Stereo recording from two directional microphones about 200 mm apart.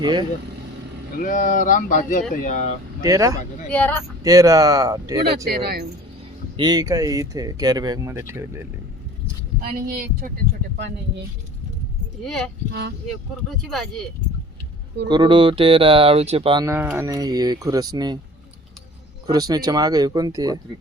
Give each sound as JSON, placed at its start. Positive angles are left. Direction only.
{"t": 0.0, "sound": "speech", "side_deg": -20}
{"t": 1.2, "sound": "speech", "side_deg": 40}
{"t": 3.0, "sound": "speech", "side_deg": -15}
{"t": 3.7, "sound": "speech", "side_deg": 5}
{"t": 4.2, "sound": "speech", "side_deg": -15}
{"t": 5.5, "sound": "speech", "side_deg": -50}
{"t": 6.6, "sound": "speech", "side_deg": -20}
{"t": 9.6, "sound": "speech", "side_deg": -45}
{"t": 12.2, "sound": "speech", "side_deg": 0}
{"t": 13.5, "sound": "speech", "side_deg": 0}
{"t": 15.0, "sound": "speech", "side_deg": -20}
{"t": 16.6, "sound": "speech", "side_deg": -10}
{"t": 19.3, "sound": "speech", "side_deg": -20}